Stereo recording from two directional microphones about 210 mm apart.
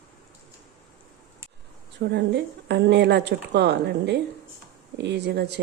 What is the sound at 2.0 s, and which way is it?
A woman's voice, 55° right (ahead or behind).